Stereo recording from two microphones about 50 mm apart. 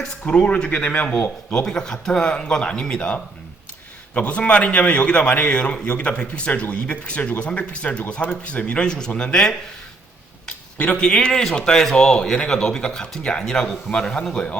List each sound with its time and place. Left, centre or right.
0.3 s speech: left
1.5 s speech: centre
10.8 s speech: left